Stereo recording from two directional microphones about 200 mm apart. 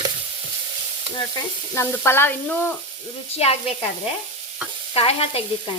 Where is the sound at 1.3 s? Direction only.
10° left (ahead or behind).